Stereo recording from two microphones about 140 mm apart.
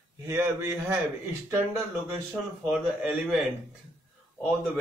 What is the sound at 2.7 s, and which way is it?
Speech, 10° right (ahead or behind).